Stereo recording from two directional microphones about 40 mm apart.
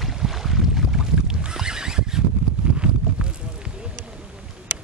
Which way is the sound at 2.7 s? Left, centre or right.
Right.